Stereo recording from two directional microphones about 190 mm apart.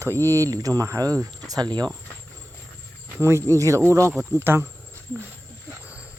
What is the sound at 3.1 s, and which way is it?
Speech, 15° right (ahead or behind).